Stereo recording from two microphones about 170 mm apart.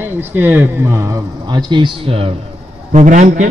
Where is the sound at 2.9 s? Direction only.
45° right (ahead or behind).